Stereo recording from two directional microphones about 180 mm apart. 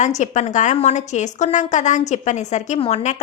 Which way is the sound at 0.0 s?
40° left (ahead or behind).